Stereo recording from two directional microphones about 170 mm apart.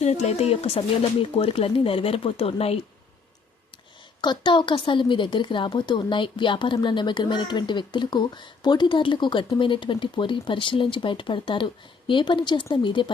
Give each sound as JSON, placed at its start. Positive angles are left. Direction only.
{"t": 0.0, "sound": "speech", "side_deg": 40}
{"t": 4.2, "sound": "a woman's voice", "side_deg": 25}